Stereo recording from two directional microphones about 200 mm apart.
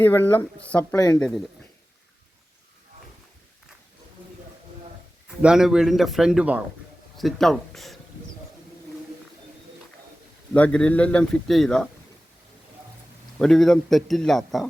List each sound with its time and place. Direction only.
0.0 s speech: 10° left (ahead or behind)
0.9 s speech: 20° left (ahead or behind)
5.4 s a man's voice: 5° right (ahead or behind)
10.5 s a man's voice: 5° left (ahead or behind)
13.4 s a man's voice: centre (ahead or behind)